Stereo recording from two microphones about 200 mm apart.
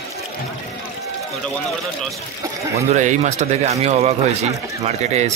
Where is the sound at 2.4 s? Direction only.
15° right (ahead or behind).